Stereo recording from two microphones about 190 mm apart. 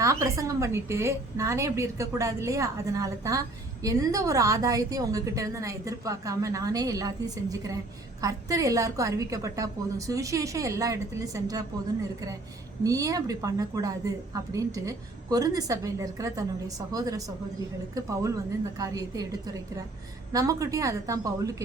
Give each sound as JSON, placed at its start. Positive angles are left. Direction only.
{"t": 0.0, "sound": "a woman's voice", "side_deg": -15}
{"t": 12.8, "sound": "a woman's voice", "side_deg": -20}